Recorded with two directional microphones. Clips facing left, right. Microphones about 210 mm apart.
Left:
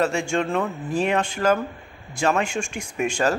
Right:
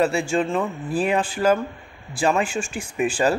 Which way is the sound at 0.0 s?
5° right (ahead or behind).